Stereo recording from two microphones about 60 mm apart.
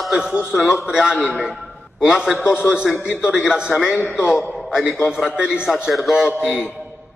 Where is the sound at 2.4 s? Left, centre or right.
Left.